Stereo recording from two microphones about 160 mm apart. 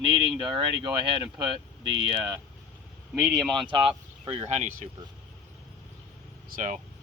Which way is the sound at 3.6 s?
30° right (ahead or behind).